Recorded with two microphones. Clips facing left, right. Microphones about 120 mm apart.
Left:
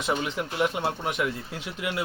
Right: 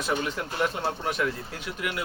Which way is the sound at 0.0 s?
20° left (ahead or behind).